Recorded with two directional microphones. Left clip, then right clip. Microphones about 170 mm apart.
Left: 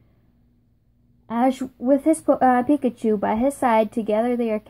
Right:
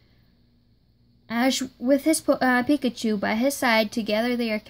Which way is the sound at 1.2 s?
30° right (ahead or behind).